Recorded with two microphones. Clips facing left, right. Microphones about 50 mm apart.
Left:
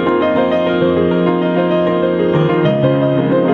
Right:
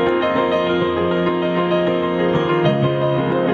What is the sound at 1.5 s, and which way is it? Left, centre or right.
Music, left.